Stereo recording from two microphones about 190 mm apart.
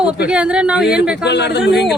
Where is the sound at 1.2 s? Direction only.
65° left (ahead or behind).